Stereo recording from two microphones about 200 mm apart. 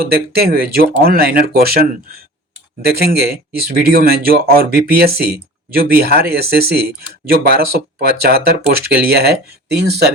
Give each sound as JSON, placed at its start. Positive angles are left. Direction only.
{"t": 0.1, "sound": "speech", "side_deg": -50}